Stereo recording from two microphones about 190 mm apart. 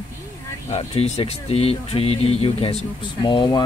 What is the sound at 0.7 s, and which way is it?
Speech, 30° left (ahead or behind).